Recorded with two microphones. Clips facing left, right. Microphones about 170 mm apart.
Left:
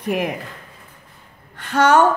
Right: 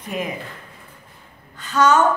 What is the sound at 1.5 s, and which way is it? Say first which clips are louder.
Speech: left 2 dB; 60° left (ahead or behind).